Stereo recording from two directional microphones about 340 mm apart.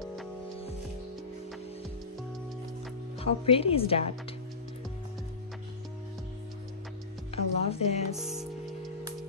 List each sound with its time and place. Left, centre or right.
0.0 s music: centre
3.2 s speech: centre
7.2 s music: centre
8.2 s music: centre